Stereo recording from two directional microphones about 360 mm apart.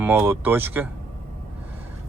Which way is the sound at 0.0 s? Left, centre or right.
Centre.